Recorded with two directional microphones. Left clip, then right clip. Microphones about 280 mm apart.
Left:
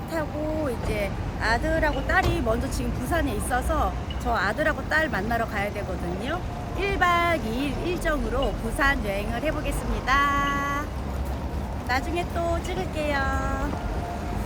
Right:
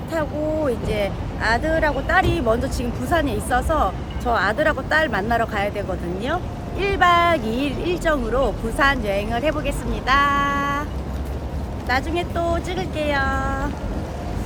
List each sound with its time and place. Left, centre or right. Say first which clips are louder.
0.9 s speech: right 5 dB; centre
11.9 s speech: right 5 dB; centre